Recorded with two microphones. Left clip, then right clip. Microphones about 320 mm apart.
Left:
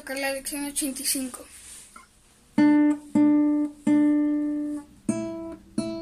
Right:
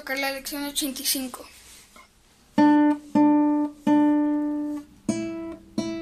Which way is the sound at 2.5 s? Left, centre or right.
Centre.